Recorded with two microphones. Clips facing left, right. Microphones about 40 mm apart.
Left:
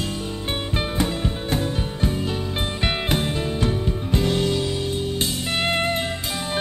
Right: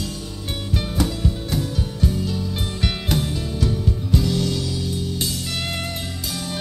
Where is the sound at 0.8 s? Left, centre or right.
Left.